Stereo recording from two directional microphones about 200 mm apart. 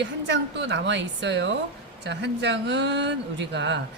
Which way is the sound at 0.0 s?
60° right (ahead or behind).